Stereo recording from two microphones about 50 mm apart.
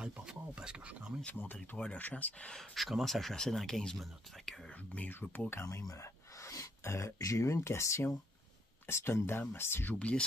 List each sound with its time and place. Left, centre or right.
0.0 s a sound: centre
1.2 s speech: left
2.7 s speech: centre
4.9 s speech: left
5.5 s speech: left
8.8 s speech: left
9.9 s speech: left